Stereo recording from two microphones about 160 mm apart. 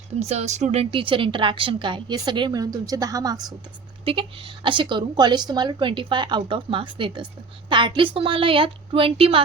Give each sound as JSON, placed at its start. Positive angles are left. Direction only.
{"t": 0.2, "sound": "a woman's voice", "side_deg": -45}
{"t": 4.0, "sound": "a woman's voice", "side_deg": -35}